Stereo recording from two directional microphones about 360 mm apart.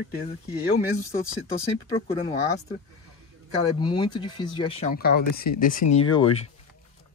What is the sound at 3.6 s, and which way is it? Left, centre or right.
Speech, centre.